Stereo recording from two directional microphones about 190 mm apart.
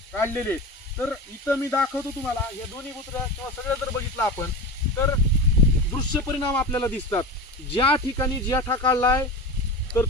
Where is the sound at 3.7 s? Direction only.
10° left (ahead or behind).